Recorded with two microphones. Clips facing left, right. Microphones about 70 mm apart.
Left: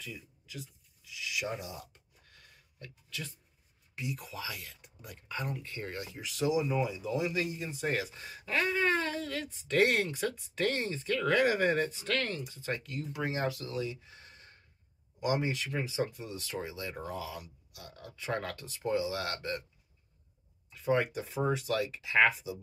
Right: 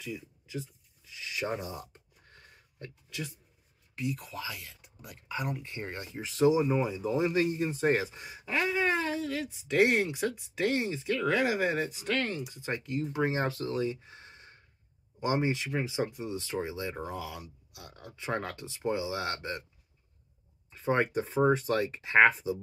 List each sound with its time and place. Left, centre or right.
0.5 s a sound: right
3.9 s speech: centre; by 19.6 s right
20.7 s speech: right